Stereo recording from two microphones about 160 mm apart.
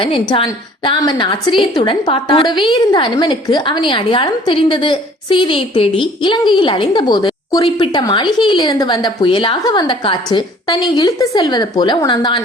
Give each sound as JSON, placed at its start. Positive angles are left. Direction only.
{"t": 0.0, "sound": "a woman's voice", "side_deg": 35}